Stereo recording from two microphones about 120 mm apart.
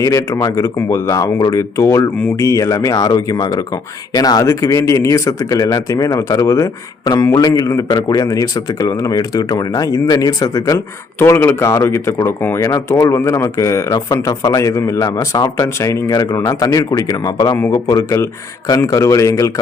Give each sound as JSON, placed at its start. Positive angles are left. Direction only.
{"t": 0.0, "sound": "speech", "side_deg": 25}